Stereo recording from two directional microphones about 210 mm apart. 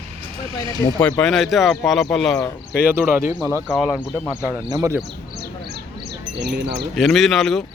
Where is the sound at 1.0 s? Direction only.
5° left (ahead or behind).